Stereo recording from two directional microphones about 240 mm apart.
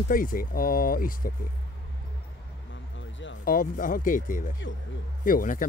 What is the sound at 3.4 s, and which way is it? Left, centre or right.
Speech, left.